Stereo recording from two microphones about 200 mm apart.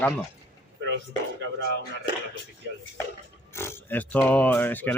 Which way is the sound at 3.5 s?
10° left (ahead or behind).